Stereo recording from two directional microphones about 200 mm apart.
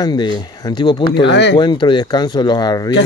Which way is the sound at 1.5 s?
20° left (ahead or behind).